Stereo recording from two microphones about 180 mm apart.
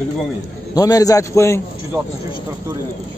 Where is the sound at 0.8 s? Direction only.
20° left (ahead or behind).